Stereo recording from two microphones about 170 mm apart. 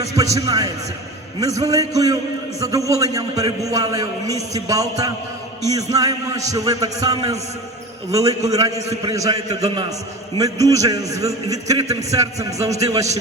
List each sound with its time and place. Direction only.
0.2 s a man's voice: 20° right (ahead or behind)